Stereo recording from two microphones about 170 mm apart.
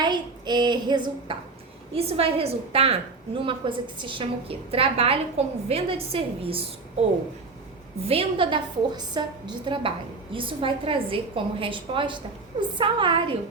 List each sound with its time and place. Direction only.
0.0 s a woman's voice: 25° right (ahead or behind)
8.0 s a woman's voice: 35° right (ahead or behind)